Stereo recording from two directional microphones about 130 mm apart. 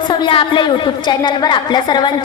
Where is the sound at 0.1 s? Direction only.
40° left (ahead or behind).